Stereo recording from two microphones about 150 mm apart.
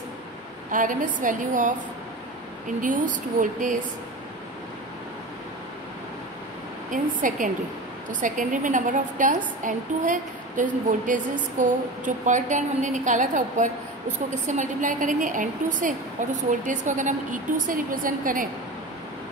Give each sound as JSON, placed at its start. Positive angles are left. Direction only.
{"t": 0.7, "sound": "a woman's voice", "side_deg": -60}
{"t": 2.8, "sound": "a woman's voice", "side_deg": -60}
{"t": 6.9, "sound": "a woman's voice", "side_deg": -60}